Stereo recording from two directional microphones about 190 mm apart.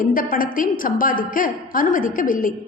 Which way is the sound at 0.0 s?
45° left (ahead or behind).